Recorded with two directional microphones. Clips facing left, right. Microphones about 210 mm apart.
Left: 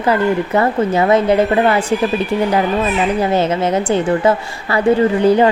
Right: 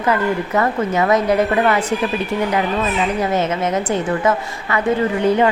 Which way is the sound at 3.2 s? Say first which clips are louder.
Left 3 dB; 30° left (ahead or behind).